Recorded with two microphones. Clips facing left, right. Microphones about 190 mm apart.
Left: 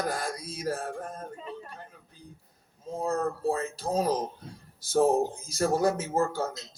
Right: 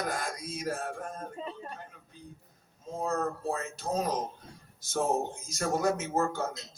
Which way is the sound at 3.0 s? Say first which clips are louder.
Left 3 dB; 35° left (ahead or behind).